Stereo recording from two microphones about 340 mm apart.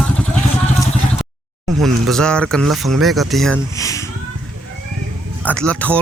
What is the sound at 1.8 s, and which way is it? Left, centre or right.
Speech, centre.